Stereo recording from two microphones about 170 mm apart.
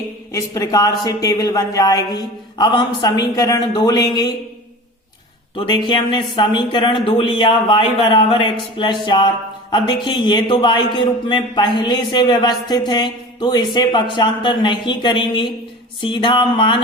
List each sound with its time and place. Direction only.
0.3 s a man's voice: 20° left (ahead or behind)
5.5 s a man's voice: 30° left (ahead or behind)